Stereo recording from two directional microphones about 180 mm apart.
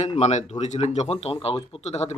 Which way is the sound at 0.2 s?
40° left (ahead or behind).